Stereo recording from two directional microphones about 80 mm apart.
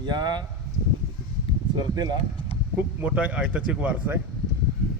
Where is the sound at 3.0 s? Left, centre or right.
Centre.